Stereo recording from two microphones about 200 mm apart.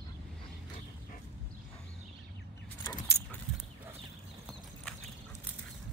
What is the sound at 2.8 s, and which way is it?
Vehicle, 15° left (ahead or behind).